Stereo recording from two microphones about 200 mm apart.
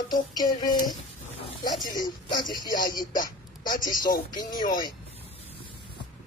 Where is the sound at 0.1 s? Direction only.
20° left (ahead or behind).